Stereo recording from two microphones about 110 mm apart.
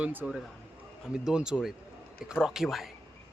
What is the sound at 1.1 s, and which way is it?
A man's voice, 5° right (ahead or behind).